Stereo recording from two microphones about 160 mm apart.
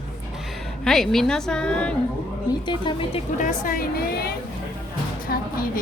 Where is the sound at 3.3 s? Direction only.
55° left (ahead or behind); by 4.3 s 70° left (ahead or behind).